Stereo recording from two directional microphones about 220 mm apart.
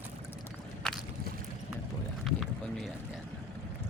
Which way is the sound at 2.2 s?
Centre (ahead or behind).